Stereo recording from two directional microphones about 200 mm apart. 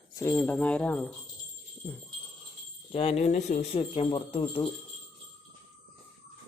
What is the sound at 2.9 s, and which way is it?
Speech, 30° left (ahead or behind).